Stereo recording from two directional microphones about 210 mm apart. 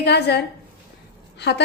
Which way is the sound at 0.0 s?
50° left (ahead or behind).